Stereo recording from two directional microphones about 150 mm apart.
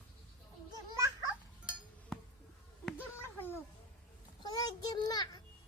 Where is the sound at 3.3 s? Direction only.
15° left (ahead or behind).